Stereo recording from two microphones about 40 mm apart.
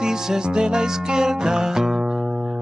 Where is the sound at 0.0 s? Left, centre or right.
Centre.